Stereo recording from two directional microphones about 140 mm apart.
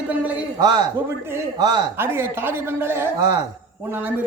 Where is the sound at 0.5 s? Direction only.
30° right (ahead or behind).